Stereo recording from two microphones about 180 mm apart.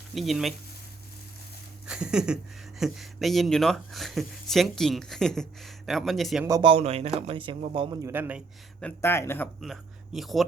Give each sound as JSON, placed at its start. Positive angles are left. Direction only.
{"t": 0.1, "sound": "speech", "side_deg": 0}
{"t": 1.9, "sound": "speech", "side_deg": -5}
{"t": 6.6, "sound": "speech", "side_deg": -30}
{"t": 8.1, "sound": "a man's voice", "side_deg": -10}
{"t": 8.8, "sound": "speech", "side_deg": 15}
{"t": 9.6, "sound": "speech", "side_deg": 0}